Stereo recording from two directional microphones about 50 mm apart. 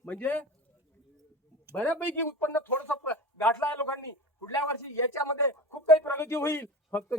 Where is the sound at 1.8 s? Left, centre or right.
Left.